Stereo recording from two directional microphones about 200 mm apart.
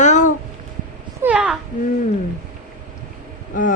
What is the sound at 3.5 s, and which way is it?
Speech, 40° left (ahead or behind).